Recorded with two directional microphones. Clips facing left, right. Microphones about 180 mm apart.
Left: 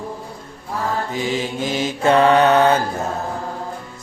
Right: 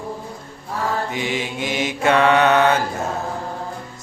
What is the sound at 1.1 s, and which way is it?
Mantra, 35° left (ahead or behind).